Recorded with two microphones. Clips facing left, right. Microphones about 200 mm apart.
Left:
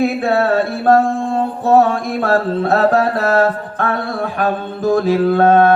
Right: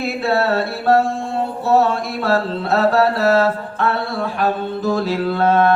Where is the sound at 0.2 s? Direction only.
50° left (ahead or behind).